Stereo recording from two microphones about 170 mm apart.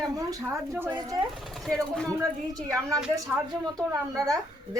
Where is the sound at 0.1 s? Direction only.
20° right (ahead or behind).